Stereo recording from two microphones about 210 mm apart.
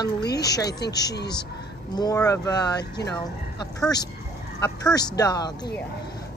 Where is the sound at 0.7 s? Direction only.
50° left (ahead or behind).